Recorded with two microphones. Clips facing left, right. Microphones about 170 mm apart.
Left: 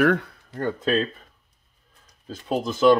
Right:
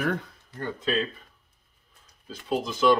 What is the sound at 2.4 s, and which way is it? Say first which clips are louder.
Speech: left 4 dB; 45° left (ahead or behind).